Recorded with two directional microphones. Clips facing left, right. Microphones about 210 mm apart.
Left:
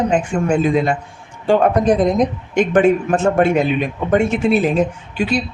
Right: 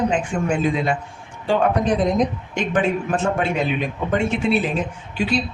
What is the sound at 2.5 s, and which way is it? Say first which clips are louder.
Speech: left 11 dB; 45° left (ahead or behind).